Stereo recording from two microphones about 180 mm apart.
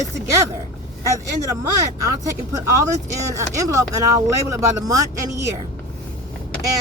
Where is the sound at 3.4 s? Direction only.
20° right (ahead or behind).